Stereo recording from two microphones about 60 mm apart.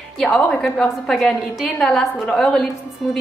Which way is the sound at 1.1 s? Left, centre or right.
Centre.